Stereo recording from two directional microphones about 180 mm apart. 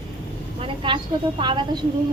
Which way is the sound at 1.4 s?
25° right (ahead or behind).